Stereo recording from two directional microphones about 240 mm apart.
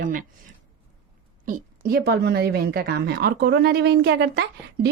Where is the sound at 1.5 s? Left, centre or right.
Right.